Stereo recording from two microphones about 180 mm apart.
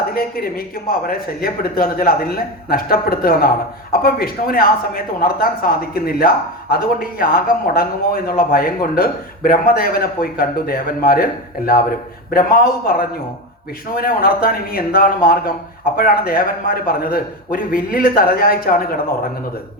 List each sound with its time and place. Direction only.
0.1 s speech: 55° left (ahead or behind)